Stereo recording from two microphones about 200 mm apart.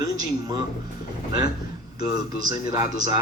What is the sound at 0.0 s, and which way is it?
Speech, 20° right (ahead or behind).